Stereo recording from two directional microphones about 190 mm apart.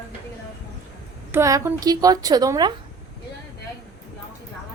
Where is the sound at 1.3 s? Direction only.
15° right (ahead or behind).